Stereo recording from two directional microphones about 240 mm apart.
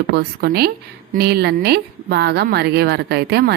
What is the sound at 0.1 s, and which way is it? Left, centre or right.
A woman's voice, right.